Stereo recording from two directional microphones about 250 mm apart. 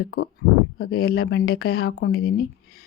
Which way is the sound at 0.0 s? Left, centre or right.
Left.